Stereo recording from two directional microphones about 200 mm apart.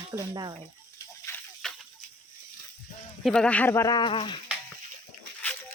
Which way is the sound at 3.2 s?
5° left (ahead or behind).